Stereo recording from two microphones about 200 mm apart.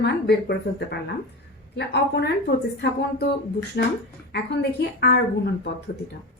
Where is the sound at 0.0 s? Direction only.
55° left (ahead or behind).